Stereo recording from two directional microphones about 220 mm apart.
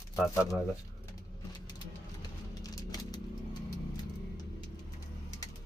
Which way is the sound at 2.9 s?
15° left (ahead or behind).